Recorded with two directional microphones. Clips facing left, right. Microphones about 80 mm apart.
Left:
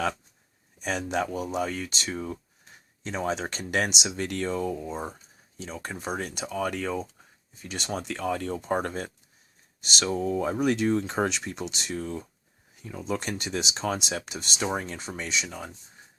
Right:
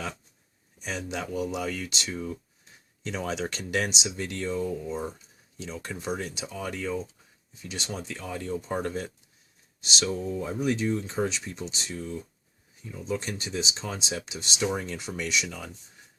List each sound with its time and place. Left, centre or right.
0.8 s speech: left
10.3 s speech: left
11.9 s speech: left
14.2 s speech: left